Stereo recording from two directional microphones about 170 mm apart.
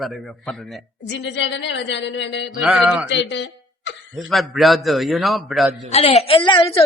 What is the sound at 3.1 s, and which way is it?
Speech, 90° left.